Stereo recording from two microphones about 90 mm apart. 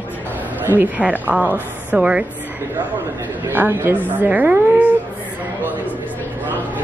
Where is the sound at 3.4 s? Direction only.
25° right (ahead or behind).